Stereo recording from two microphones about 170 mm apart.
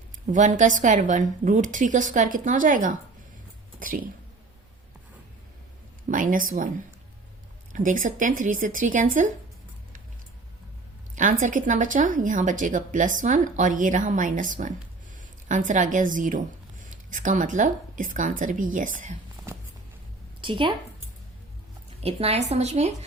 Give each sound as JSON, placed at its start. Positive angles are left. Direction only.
{"t": 0.3, "sound": "speech", "side_deg": -45}
{"t": 6.1, "sound": "speech", "side_deg": -50}
{"t": 7.7, "sound": "speech", "side_deg": -50}
{"t": 11.1, "sound": "speech", "side_deg": -50}
{"t": 20.4, "sound": "a woman's voice", "side_deg": -30}
{"t": 22.0, "sound": "a woman's voice", "side_deg": -35}